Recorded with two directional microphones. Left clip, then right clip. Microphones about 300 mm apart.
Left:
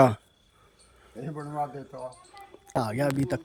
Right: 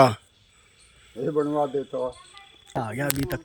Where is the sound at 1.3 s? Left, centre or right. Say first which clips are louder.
Right 9 dB; right.